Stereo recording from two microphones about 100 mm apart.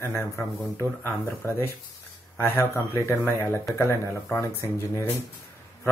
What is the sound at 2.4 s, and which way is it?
A man's voice, 25° left (ahead or behind).